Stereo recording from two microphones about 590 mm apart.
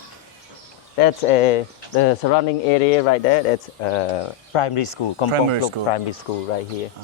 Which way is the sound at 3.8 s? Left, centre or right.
Left.